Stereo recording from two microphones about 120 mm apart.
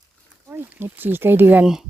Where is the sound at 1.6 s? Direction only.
5° right (ahead or behind).